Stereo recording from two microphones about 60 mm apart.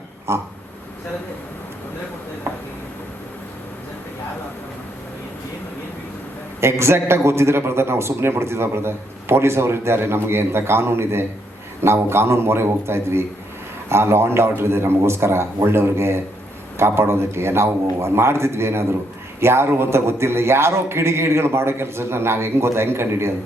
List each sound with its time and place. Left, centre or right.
0.3 s a man's voice: right
6.6 s a man's voice: right